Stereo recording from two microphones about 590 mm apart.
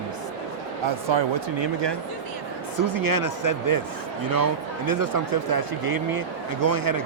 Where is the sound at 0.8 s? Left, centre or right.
Right.